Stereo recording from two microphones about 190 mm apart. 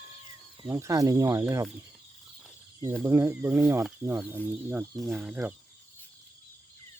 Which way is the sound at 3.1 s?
15° right (ahead or behind).